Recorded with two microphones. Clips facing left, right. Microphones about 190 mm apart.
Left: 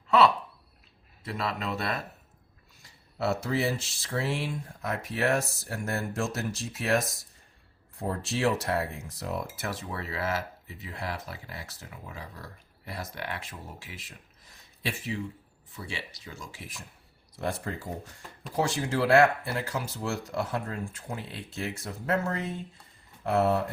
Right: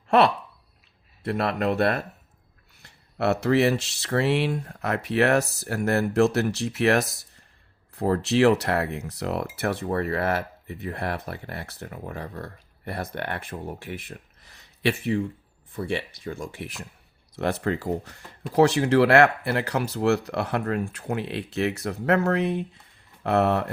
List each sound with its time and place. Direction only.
1.2 s speech: 60° right (ahead or behind)